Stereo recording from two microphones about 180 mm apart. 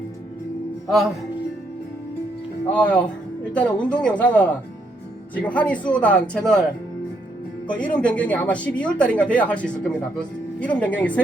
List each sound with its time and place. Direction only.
2.8 s speech: 5° left (ahead or behind)
7.7 s speech: 5° left (ahead or behind)